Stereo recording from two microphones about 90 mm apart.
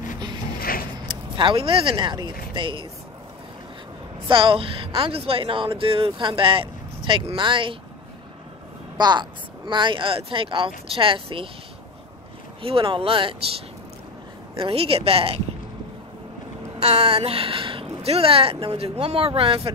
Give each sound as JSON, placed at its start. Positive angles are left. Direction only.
{"t": 1.0, "sound": "speech", "side_deg": -65}
{"t": 4.3, "sound": "speech", "side_deg": -75}
{"t": 8.9, "sound": "speech", "side_deg": -55}
{"t": 12.6, "sound": "speech", "side_deg": -80}
{"t": 14.6, "sound": "speech", "side_deg": -90}
{"t": 17.0, "sound": "speech", "side_deg": -90}